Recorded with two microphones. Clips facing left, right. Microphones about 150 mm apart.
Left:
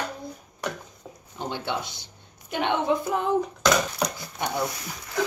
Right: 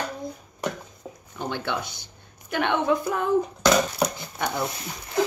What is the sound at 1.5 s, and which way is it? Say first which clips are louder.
A woman's voice: right 1 dB; 20° left (ahead or behind).